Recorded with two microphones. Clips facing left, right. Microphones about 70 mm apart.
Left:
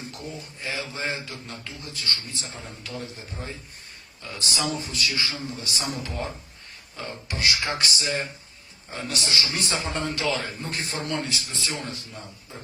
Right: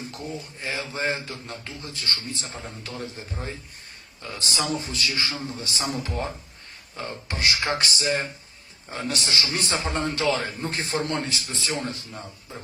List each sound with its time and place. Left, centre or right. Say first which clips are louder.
0.1 s speech: right 3 dB; right
9.1 s speech: left 1 dB; right